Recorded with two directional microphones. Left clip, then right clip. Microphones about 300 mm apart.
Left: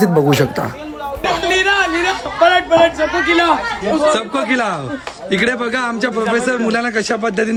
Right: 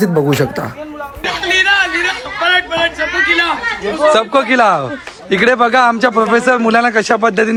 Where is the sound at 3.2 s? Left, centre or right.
Left.